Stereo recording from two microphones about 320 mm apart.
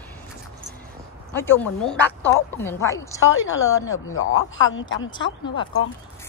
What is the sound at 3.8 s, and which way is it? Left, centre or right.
Speech, left.